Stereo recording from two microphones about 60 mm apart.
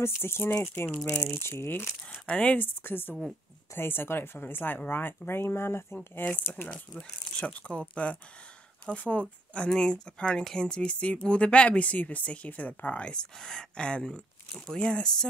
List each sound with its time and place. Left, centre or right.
0.0 s speech: left
2.2 s speech: centre
2.6 s speech: left
7.0 s speech: centre